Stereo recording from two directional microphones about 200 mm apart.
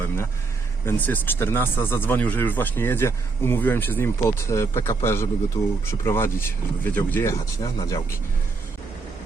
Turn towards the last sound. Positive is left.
turn(degrees=15)  # may be behind; listen again after turning